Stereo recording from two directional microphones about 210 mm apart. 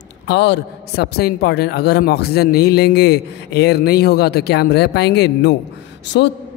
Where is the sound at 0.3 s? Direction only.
55° left (ahead or behind).